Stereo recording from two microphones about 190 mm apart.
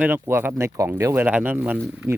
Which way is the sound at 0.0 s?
10° right (ahead or behind).